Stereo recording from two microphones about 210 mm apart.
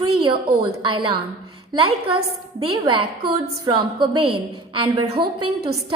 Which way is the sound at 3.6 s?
20° right (ahead or behind).